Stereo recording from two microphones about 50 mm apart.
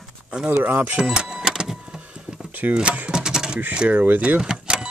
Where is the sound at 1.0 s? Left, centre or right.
Centre.